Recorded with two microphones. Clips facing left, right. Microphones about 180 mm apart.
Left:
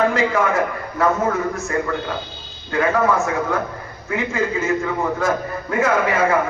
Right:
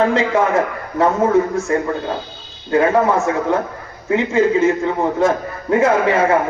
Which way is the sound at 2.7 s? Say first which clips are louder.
Right 4 dB; 30° right (ahead or behind).